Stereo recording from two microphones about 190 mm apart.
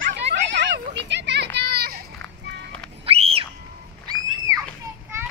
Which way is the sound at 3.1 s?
30° right (ahead or behind).